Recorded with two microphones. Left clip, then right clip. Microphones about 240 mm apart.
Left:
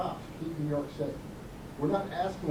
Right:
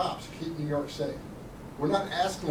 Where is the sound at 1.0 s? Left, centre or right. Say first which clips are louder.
Right 2 dB; centre.